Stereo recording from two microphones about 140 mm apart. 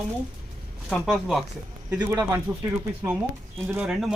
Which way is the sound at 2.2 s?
25° right (ahead or behind).